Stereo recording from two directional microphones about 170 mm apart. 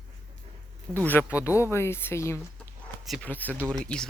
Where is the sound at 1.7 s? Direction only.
15° left (ahead or behind).